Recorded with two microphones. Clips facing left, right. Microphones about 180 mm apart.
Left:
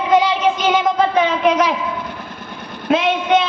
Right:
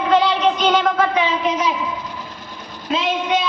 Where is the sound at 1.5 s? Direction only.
65° left (ahead or behind).